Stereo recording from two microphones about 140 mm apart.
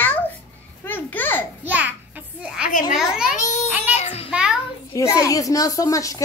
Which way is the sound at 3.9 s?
50° left (ahead or behind).